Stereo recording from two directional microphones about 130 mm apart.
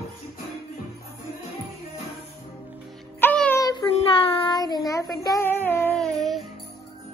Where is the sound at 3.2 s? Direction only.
10° left (ahead or behind).